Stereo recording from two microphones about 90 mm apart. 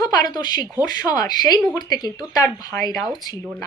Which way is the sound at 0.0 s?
45° left (ahead or behind).